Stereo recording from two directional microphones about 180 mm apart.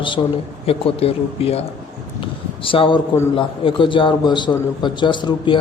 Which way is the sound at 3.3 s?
30° left (ahead or behind).